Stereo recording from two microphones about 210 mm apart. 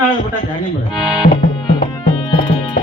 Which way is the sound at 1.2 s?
20° left (ahead or behind).